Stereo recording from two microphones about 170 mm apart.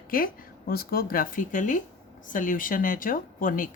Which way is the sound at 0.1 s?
55° left (ahead or behind).